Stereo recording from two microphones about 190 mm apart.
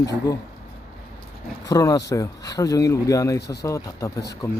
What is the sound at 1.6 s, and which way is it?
Speech, 20° left (ahead or behind).